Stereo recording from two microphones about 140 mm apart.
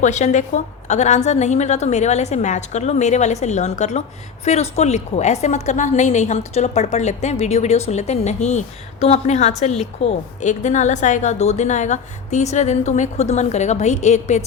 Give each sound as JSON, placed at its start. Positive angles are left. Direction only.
{"t": 0.0, "sound": "a woman's voice", "side_deg": 55}